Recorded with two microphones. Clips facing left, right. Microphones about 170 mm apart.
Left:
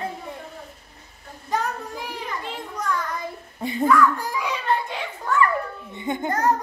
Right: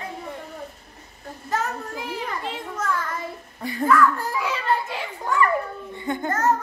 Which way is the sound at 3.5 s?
20° left (ahead or behind).